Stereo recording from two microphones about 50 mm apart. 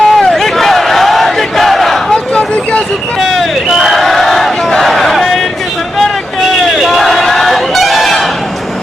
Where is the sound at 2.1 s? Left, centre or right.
Left.